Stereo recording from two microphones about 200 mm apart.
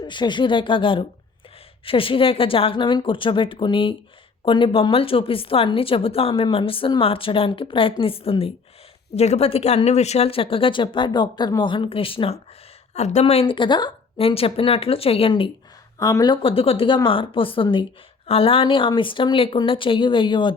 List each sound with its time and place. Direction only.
0.0 s a woman's voice: 25° left (ahead or behind)